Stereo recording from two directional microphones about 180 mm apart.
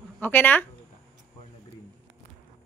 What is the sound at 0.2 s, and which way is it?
Speech, 10° left (ahead or behind).